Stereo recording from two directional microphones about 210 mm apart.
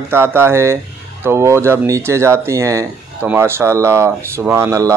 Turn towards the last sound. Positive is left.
turn(degrees=-15)  # may be behind; listen again after turning